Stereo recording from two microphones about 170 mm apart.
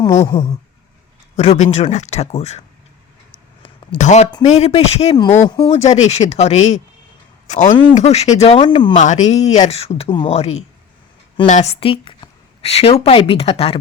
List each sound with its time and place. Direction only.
0.0 s speech: 20° left (ahead or behind)
1.4 s speech: 40° left (ahead or behind)
3.9 s speech: 45° left (ahead or behind)
5.1 s speech: 25° left (ahead or behind)
5.6 s speech: 40° left (ahead or behind)
7.9 s speech: 40° left (ahead or behind)
8.9 s speech: 45° left (ahead or behind)